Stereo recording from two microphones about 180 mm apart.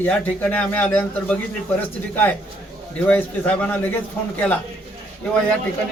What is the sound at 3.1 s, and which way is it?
Speech, 10° left (ahead or behind).